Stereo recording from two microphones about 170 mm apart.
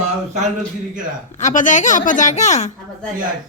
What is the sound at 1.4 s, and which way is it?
A woman's voice, 45° left (ahead or behind).